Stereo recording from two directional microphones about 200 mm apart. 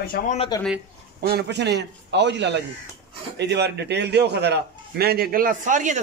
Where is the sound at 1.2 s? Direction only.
55° right (ahead or behind).